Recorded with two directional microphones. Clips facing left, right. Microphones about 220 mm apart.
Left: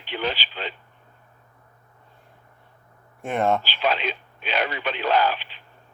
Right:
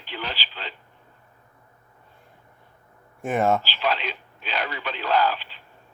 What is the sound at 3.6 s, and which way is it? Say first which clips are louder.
Speech: left 2 dB; 20° left (ahead or behind).